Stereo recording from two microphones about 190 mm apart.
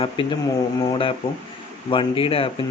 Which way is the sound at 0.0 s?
25° left (ahead or behind).